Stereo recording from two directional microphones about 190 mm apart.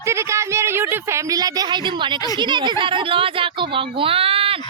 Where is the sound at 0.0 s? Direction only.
15° right (ahead or behind); by 4.6 s 30° right (ahead or behind).